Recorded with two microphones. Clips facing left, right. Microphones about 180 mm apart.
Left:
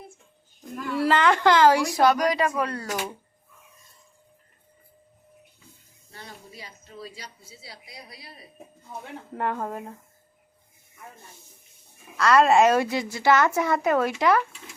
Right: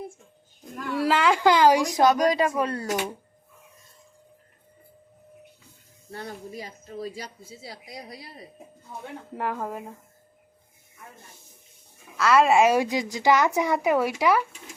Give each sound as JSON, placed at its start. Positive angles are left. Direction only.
{"t": 0.9, "sound": "speech", "side_deg": -10}
{"t": 6.1, "sound": "speech", "side_deg": -55}
{"t": 9.3, "sound": "speech", "side_deg": -5}
{"t": 12.1, "sound": "a woman's voice", "side_deg": -5}